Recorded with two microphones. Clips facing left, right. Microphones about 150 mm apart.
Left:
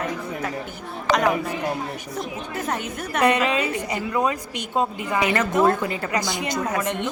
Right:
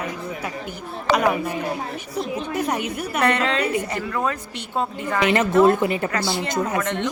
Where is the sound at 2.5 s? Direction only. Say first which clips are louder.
Right 2 dB; 15° right (ahead or behind).